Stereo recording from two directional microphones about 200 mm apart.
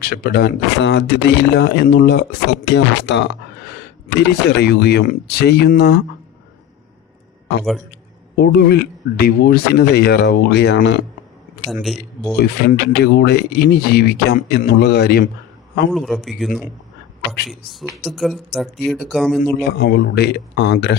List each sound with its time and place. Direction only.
0.0 s speech: 50° left (ahead or behind)
8.4 s speech: 55° left (ahead or behind)
11.7 s speech: centre (ahead or behind)
12.4 s speech: 55° left (ahead or behind)
15.9 s speech: centre (ahead or behind)
17.7 s speech: centre (ahead or behind)
19.5 s speech: 55° left (ahead or behind)